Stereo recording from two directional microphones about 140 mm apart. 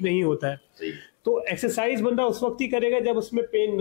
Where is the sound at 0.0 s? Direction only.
20° left (ahead or behind).